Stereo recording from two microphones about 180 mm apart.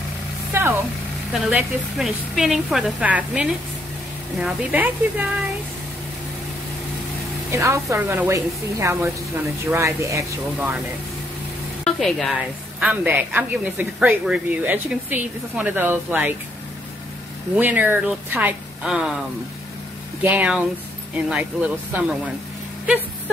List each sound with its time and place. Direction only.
0.5 s a sound: 15° right (ahead or behind)
1.3 s a woman's voice: centre (ahead or behind)
7.5 s speech: 15° right (ahead or behind)
11.8 s stir: centre (ahead or behind)
12.8 s speech: 10° right (ahead or behind)
17.6 s speech: 10° right (ahead or behind)
20.2 s speech: 10° right (ahead or behind)